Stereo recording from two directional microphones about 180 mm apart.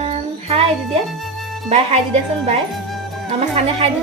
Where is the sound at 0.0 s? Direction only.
35° right (ahead or behind).